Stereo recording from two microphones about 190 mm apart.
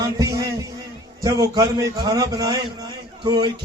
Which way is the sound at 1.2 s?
20° right (ahead or behind).